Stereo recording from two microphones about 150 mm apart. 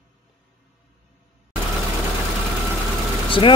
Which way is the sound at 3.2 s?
35° left (ahead or behind).